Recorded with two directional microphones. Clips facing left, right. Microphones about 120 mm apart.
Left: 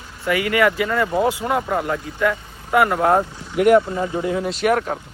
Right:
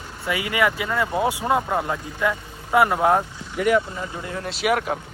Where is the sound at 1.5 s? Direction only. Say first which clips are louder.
Left 1 dB; 20° right (ahead or behind).